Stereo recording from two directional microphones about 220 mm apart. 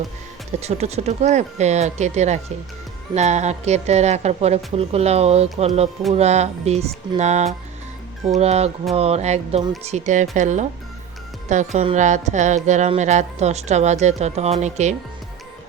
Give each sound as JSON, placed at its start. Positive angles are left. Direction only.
{"t": 0.6, "sound": "a woman's voice", "side_deg": -30}